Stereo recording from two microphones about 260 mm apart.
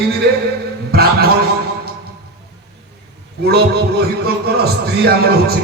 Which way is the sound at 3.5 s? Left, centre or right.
Right.